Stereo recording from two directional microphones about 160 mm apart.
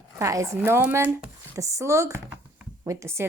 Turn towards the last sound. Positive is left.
turn(degrees=-15)  # may be behind; listen again after turning